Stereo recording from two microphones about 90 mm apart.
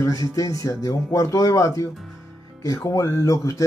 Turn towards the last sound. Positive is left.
turn(degrees=35)  # may be behind; listen again after turning